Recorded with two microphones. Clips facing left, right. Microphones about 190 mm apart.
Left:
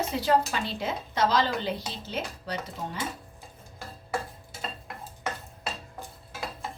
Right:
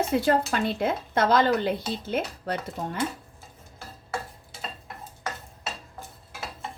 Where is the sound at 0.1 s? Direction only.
55° right (ahead or behind).